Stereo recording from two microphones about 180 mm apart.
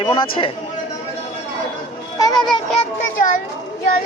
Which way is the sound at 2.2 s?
25° left (ahead or behind).